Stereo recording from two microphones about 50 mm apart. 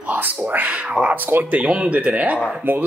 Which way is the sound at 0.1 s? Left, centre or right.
Right.